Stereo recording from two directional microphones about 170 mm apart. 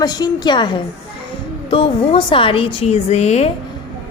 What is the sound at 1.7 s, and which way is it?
A woman's voice, 30° left (ahead or behind).